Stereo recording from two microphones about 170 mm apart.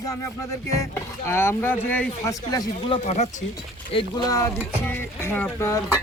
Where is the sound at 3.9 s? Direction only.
25° left (ahead or behind).